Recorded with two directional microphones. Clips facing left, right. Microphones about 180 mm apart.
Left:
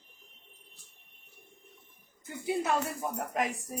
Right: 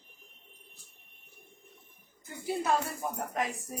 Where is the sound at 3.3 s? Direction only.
15° left (ahead or behind).